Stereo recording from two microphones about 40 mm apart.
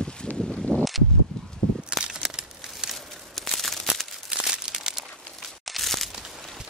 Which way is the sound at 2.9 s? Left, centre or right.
Centre.